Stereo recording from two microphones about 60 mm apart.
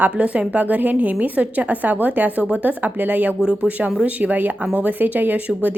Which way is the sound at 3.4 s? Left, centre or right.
Centre.